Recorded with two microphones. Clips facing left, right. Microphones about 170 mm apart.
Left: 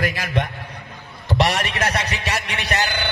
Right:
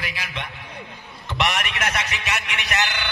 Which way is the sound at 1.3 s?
35° left (ahead or behind).